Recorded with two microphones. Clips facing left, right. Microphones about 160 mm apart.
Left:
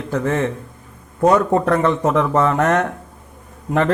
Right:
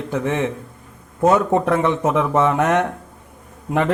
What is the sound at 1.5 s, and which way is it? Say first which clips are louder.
Speech: left 1 dB; 15° right (ahead or behind).